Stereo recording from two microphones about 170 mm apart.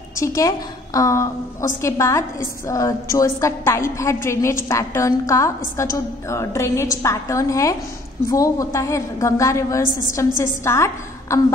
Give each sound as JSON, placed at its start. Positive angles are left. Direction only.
{"t": 0.1, "sound": "a woman's voice", "side_deg": 20}